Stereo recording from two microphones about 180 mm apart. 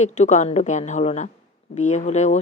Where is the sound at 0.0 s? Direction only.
40° left (ahead or behind).